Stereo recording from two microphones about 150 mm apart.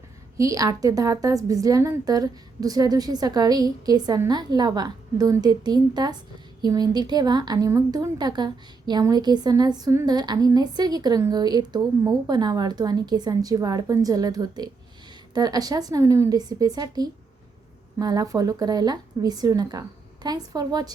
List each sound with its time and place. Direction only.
0.3 s a woman's voice: 20° right (ahead or behind)